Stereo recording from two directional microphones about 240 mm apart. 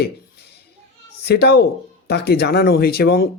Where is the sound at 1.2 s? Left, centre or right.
Left.